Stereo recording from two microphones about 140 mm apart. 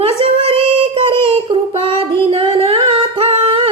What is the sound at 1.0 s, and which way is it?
Child singing, 40° right (ahead or behind).